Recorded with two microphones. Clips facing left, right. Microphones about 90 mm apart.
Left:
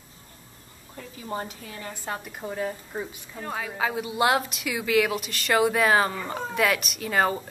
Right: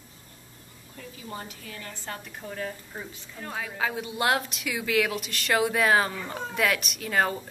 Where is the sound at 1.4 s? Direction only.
20° left (ahead or behind).